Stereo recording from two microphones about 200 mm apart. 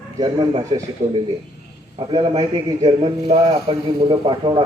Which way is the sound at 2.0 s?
25° right (ahead or behind).